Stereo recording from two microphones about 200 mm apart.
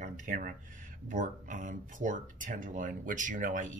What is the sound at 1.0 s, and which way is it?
Speech, 40° right (ahead or behind).